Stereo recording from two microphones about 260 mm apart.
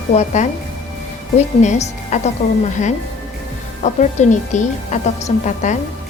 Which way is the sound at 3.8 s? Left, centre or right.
Left.